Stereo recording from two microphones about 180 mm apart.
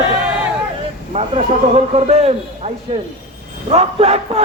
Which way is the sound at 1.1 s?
35° right (ahead or behind).